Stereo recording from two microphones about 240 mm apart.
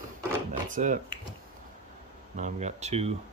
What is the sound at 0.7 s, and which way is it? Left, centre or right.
Speech, right.